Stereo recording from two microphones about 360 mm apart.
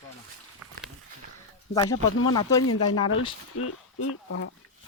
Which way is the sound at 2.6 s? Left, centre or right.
Left.